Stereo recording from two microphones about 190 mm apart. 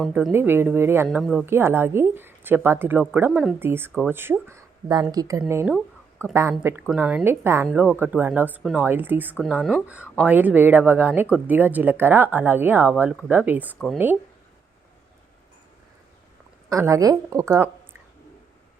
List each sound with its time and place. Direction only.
0.1 s speech: 10° right (ahead or behind)
1.0 s speech: centre (ahead or behind)
5.7 s a sound: centre (ahead or behind)
6.3 s speech: 15° right (ahead or behind)
16.6 s speech: 15° right (ahead or behind)